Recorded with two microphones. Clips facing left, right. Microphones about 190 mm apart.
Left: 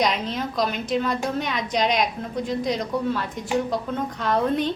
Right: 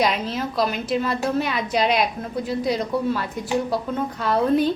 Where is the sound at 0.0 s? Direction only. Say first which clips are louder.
Right 1 dB; 5° right (ahead or behind).